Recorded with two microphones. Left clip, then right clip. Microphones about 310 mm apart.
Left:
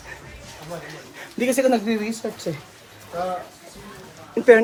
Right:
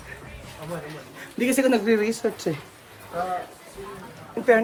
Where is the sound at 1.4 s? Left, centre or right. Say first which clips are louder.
Left 2 dB; centre.